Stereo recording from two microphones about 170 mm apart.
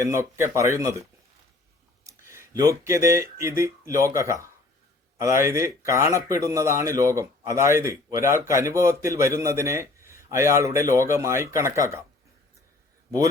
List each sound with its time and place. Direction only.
0.0 s speech: 15° right (ahead or behind)
2.0 s speech: 15° right (ahead or behind)